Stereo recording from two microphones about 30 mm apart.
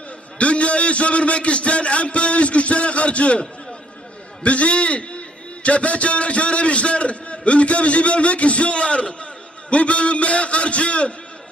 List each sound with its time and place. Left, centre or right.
0.3 s a man's voice: left
4.4 s a man's voice: left